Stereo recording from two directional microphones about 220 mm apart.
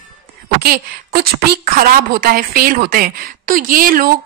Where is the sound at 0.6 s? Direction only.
45° right (ahead or behind).